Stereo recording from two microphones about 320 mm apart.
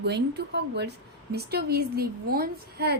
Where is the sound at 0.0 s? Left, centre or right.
Right.